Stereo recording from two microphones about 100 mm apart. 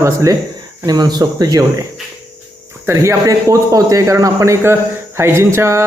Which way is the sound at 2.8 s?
30° right (ahead or behind).